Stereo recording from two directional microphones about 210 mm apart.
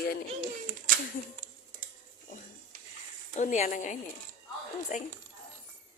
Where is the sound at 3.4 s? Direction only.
35° left (ahead or behind).